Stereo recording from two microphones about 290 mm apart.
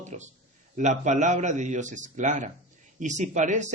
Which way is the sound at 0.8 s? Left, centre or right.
Right.